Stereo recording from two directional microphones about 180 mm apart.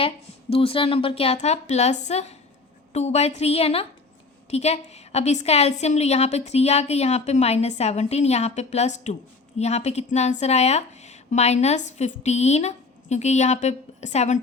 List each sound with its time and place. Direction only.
0.5 s a woman's voice: 30° left (ahead or behind)